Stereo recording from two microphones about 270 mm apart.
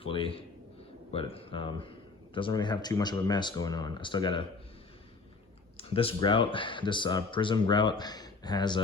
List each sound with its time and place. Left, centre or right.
0.0 s a sound: centre
1.1 s speech: left
5.7 s speech: left